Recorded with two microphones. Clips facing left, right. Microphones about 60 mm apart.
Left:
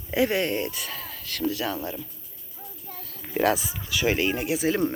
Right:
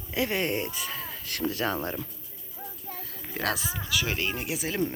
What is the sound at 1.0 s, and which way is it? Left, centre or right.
Speech, right.